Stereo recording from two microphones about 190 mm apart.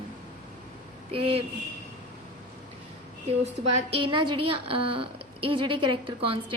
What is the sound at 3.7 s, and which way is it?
A woman's voice, 30° right (ahead or behind).